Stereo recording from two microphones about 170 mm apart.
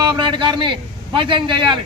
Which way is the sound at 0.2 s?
30° right (ahead or behind).